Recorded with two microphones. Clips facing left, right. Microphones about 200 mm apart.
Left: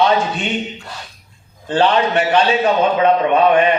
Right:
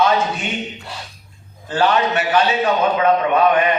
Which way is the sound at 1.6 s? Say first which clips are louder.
Left 2 dB; 30° left (ahead or behind).